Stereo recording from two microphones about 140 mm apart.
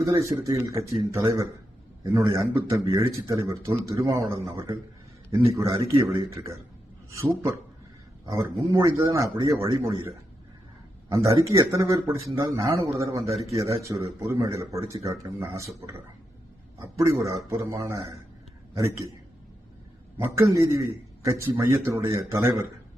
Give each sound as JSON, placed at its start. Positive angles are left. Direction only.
{"t": 0.0, "sound": "speech", "side_deg": -20}
{"t": 11.1, "sound": "speech", "side_deg": -20}
{"t": 11.3, "sound": "speech", "side_deg": -35}
{"t": 11.7, "sound": "speech", "side_deg": -25}
{"t": 17.2, "sound": "speech", "side_deg": -20}
{"t": 20.2, "sound": "speech", "side_deg": -20}